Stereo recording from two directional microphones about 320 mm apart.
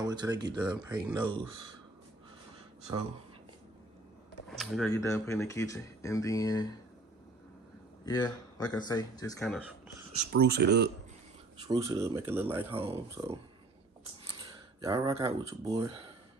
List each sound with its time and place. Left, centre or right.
0.0 s speech: centre
4.6 s speech: centre
8.0 s speech: centre
10.3 s speech: right
11.6 s speech: centre
12.7 s speech: centre
14.8 s speech: centre